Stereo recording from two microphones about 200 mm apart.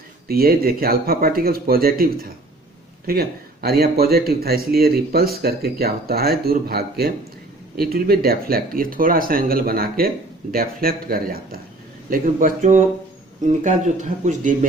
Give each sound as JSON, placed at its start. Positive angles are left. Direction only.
{"t": 0.3, "sound": "a man's voice", "side_deg": -50}